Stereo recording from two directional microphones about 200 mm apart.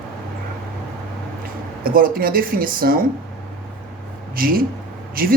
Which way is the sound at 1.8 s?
45° right (ahead or behind).